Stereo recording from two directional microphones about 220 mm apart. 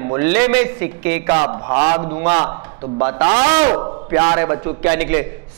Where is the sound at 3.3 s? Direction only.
25° right (ahead or behind).